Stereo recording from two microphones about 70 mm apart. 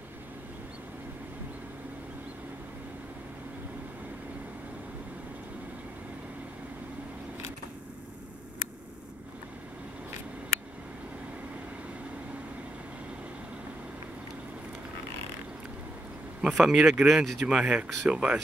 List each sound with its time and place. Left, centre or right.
16.3 s speech: centre
17.5 s speech: centre